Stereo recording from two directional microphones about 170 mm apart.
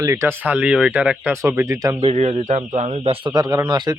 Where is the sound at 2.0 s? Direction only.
40° right (ahead or behind).